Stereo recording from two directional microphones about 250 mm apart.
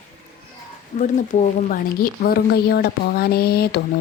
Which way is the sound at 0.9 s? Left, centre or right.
Left.